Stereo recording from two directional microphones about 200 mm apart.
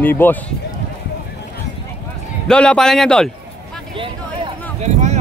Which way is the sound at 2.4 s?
5° left (ahead or behind).